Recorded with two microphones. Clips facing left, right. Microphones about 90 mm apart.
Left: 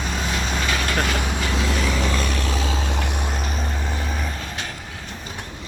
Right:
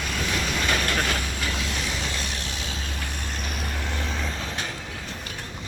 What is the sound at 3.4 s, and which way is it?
Vehicle, 35° left (ahead or behind).